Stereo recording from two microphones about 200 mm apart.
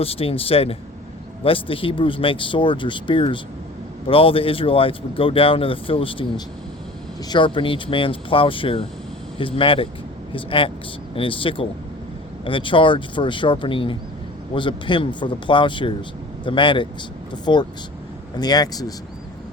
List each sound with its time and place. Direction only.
0.0 s speech: 30° left (ahead or behind)